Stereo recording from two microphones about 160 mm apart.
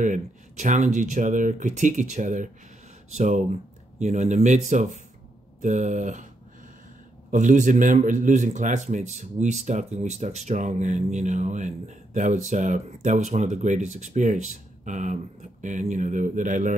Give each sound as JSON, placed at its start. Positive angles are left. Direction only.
{"t": 0.0, "sound": "a man's voice", "side_deg": -50}
{"t": 7.2, "sound": "a man's voice", "side_deg": -50}